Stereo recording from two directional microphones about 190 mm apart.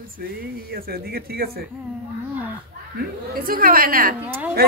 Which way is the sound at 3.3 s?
50° right (ahead or behind).